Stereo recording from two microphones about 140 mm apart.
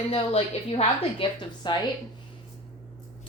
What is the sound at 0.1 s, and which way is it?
A woman's voice, 45° left (ahead or behind).